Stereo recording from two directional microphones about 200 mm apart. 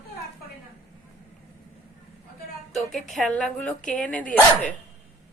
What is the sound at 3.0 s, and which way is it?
A woman's voice, 5° left (ahead or behind).